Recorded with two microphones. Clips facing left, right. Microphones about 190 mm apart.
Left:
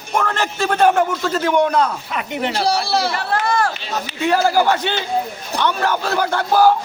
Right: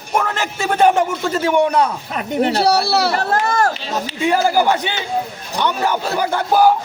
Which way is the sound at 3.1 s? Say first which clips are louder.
Right 2 dB; 40° right (ahead or behind).